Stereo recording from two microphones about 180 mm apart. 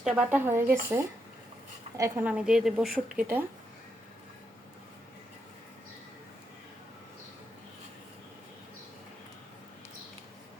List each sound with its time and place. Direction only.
0.0 s a woman's voice: 5° right (ahead or behind)